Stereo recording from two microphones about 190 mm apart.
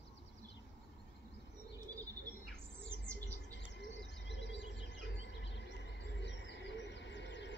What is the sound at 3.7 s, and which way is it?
Bird, 65° left (ahead or behind).